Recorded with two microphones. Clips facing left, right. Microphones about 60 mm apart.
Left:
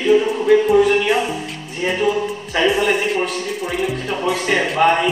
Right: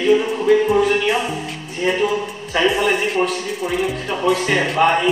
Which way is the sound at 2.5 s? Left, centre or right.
Centre.